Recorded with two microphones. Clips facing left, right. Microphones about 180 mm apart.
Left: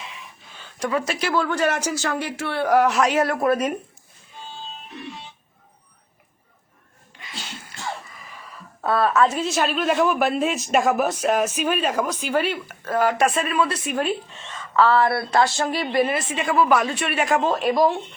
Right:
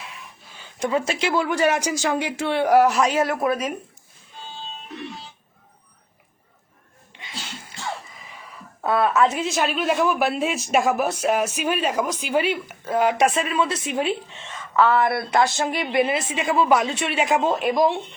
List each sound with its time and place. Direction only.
0.0 s a sound: centre (ahead or behind)
0.6 s a woman's voice: 25° right (ahead or behind); by 3.8 s centre (ahead or behind)
8.8 s a woman's voice: 20° right (ahead or behind)